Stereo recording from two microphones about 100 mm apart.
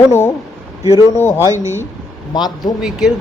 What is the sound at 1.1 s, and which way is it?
Speech, 25° left (ahead or behind).